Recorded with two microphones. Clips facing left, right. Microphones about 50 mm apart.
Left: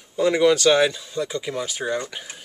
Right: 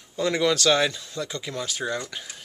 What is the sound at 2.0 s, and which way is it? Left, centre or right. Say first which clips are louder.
Speech: left 3 dB; left.